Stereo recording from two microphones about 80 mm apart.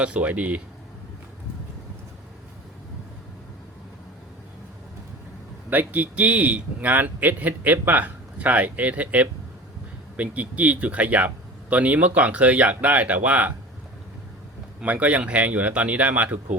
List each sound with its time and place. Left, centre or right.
0.0 s speech: centre
5.7 s a man's voice: right
14.8 s speech: centre